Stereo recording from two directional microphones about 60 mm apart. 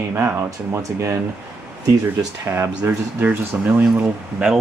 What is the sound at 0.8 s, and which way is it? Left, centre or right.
Speech, right.